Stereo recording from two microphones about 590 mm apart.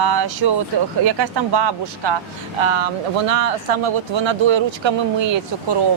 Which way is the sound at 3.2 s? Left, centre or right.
Right.